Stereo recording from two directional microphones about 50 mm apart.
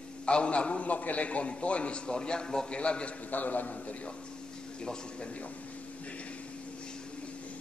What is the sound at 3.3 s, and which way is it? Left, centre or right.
Speech, left.